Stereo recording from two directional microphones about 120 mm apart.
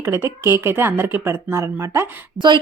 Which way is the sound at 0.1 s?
20° right (ahead or behind).